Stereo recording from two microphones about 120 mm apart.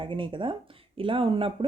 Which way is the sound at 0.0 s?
45° right (ahead or behind).